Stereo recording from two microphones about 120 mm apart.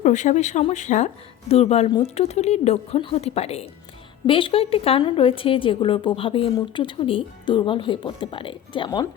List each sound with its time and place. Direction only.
0.0 s a woman's voice: 90° left; by 3.7 s 60° left (ahead or behind)
4.3 s a woman's voice: 45° left (ahead or behind)